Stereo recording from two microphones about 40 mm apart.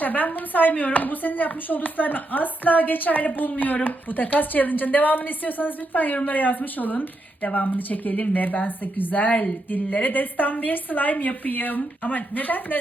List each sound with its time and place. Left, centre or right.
0.0 s a woman's voice: left